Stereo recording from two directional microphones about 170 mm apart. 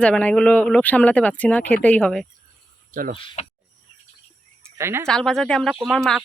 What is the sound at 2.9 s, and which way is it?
Speech, 50° right (ahead or behind).